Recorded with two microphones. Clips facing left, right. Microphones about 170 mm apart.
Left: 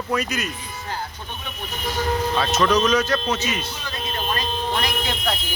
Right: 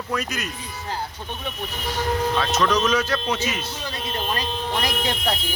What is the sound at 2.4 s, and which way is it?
Speech, 5° left (ahead or behind).